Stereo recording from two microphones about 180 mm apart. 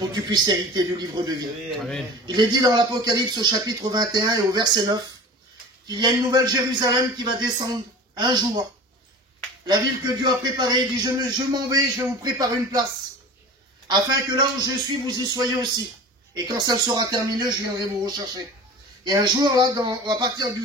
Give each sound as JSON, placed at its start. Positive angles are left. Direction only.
{"t": 0.1, "sound": "speech", "side_deg": -25}
{"t": 1.8, "sound": "a man's voice", "side_deg": 0}
{"t": 2.2, "sound": "speech", "side_deg": -25}
{"t": 10.2, "sound": "speech", "side_deg": -20}
{"t": 13.8, "sound": "speech", "side_deg": -20}